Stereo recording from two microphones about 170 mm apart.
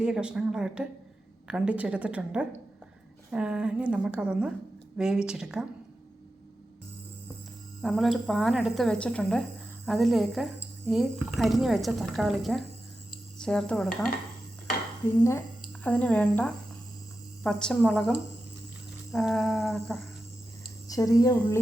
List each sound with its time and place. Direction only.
0.0 s a woman's voice: 5° right (ahead or behind)
7.8 s a woman's voice: centre (ahead or behind)
15.8 s a woman's voice: 10° left (ahead or behind)
20.8 s speech: 20° left (ahead or behind)